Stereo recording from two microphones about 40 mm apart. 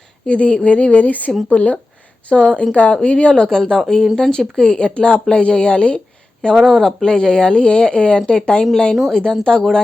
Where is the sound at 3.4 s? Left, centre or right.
Centre.